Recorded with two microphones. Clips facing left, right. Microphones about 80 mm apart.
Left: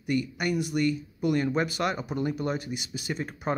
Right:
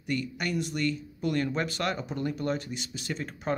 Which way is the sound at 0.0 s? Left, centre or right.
Centre.